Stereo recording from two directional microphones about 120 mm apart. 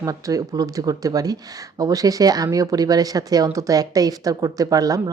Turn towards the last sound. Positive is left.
turn(degrees=-30)  # may be behind; listen again after turning